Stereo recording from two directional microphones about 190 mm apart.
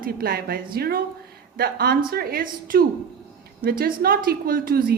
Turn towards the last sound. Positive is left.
turn(degrees=-50)  # may be behind; listen again after turning